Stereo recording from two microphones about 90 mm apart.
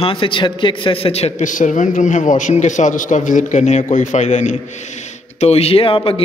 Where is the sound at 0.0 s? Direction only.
75° left (ahead or behind).